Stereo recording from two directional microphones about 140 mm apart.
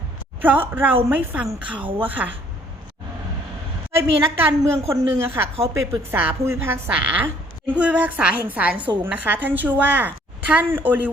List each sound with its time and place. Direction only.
0.4 s a woman's voice: 15° right (ahead or behind)
4.4 s a woman's voice: 20° right (ahead or behind)